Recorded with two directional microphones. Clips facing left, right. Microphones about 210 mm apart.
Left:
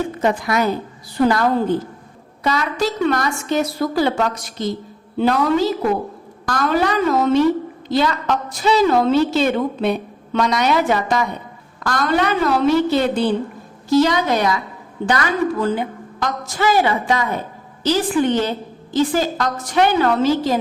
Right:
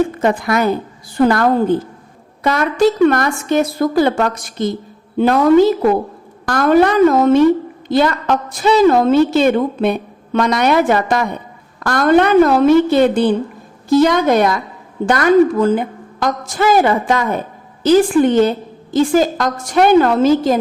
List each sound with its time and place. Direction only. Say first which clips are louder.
0.2 s a woman's voice: right 3 dB; 55° right (ahead or behind)